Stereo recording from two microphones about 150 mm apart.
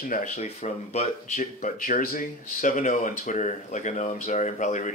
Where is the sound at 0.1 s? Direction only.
55° left (ahead or behind).